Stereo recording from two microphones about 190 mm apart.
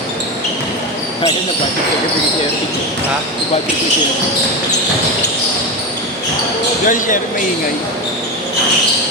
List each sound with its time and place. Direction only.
6.8 s speech: 45° left (ahead or behind)